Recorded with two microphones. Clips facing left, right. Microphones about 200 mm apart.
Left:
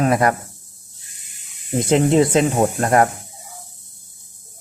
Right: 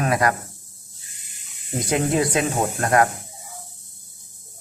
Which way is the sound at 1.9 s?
25° left (ahead or behind).